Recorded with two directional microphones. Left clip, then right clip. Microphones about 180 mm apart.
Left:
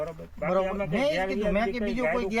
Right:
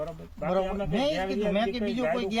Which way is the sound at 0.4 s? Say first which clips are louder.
Left 2 dB; 25° left (ahead or behind).